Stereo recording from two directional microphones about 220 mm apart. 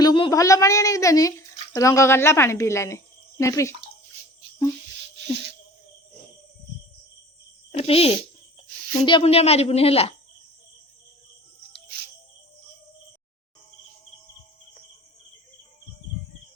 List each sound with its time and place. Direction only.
0.0 s speech: 20° left (ahead or behind)
7.7 s speech: 25° left (ahead or behind)